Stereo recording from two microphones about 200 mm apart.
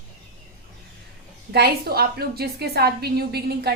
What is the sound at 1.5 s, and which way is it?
A woman's voice, 50° right (ahead or behind).